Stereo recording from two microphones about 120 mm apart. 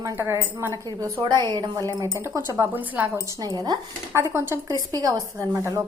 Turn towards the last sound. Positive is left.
turn(degrees=-30)  # may be behind; listen again after turning